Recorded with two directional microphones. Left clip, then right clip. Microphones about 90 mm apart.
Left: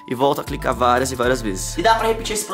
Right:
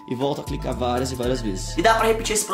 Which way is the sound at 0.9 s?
35° left (ahead or behind).